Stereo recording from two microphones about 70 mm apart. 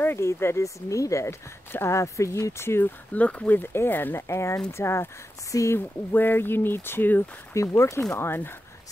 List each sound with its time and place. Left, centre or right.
0.0 s speech: left
1.7 s speech: left
3.2 s speech: centre
4.3 s speech: left
5.5 s speech: left
5.8 s speech: left
7.5 s speech: left